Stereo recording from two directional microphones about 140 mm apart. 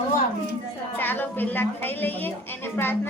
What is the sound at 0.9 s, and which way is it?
A woman's voice, 15° left (ahead or behind).